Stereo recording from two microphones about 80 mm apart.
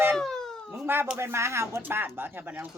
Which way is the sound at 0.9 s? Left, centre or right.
Right.